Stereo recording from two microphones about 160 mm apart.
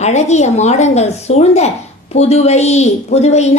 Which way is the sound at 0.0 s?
45° left (ahead or behind).